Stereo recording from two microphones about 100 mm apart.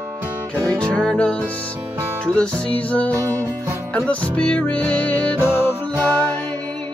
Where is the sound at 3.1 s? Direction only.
30° right (ahead or behind).